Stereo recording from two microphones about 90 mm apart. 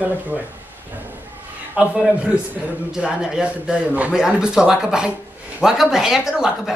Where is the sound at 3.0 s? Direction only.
10° right (ahead or behind).